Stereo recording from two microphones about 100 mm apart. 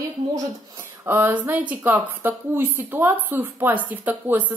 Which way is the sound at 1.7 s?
20° right (ahead or behind).